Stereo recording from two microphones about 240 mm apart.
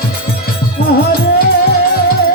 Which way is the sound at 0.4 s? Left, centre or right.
Left.